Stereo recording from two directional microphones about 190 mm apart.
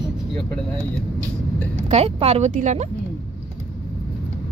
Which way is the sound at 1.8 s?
35° right (ahead or behind).